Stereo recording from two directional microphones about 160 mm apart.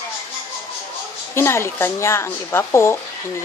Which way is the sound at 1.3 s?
15° left (ahead or behind).